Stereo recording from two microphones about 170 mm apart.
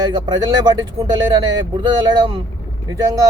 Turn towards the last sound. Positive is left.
turn(degrees=-20)  # may be behind; listen again after turning